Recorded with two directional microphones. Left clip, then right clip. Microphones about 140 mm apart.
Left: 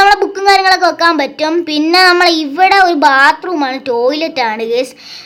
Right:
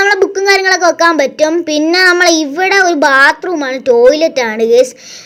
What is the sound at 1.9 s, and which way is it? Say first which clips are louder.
A child's voice: left 1 dB; 20° right (ahead or behind).